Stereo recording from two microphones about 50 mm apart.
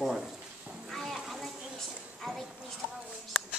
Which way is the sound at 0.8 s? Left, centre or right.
Centre.